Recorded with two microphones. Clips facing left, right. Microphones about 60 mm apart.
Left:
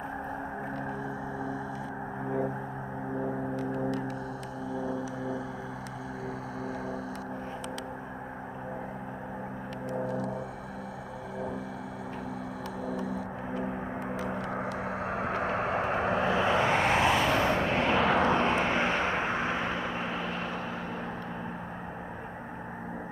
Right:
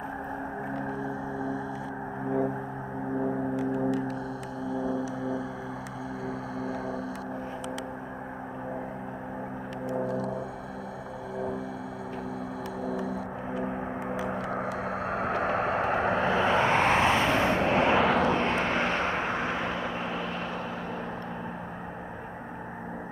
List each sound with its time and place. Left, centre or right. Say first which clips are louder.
3.5 s gong: right 4 dB; centre
14.8 s vehicle: right 2 dB; centre
15.8 s vehicle: right 2 dB; right
17.3 s vehicle: right 2 dB; centre
18.1 s vehicle: even; centre